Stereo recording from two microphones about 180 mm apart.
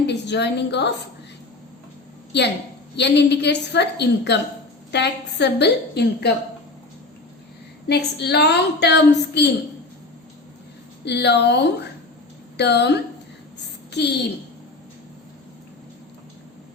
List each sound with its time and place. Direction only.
0.1 s a woman's voice: 70° left (ahead or behind)
2.9 s a woman's voice: 70° left (ahead or behind)
7.9 s a woman's voice: 65° left (ahead or behind)
11.0 s a woman's voice: 70° left (ahead or behind)